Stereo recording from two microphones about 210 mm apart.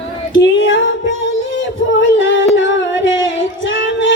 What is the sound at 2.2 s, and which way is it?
Singing, 65° left (ahead or behind).